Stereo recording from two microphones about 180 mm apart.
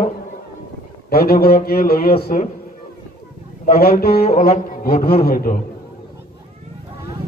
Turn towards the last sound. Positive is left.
turn(degrees=55)  # may be behind; listen again after turning